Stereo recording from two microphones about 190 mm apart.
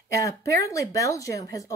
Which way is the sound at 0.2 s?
15° left (ahead or behind).